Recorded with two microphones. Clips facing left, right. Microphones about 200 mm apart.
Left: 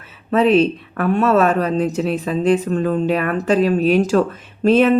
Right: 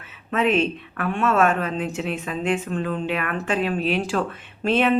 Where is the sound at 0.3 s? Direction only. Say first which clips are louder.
Left 7 dB; 35° left (ahead or behind).